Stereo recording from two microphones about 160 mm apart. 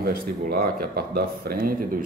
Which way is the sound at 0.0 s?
70° right (ahead or behind).